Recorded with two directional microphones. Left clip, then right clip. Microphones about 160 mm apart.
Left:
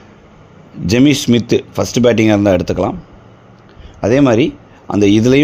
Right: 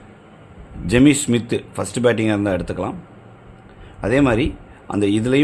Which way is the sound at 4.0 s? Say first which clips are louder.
Left 6 dB; 35° left (ahead or behind).